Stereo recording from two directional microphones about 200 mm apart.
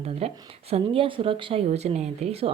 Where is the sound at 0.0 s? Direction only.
30° right (ahead or behind).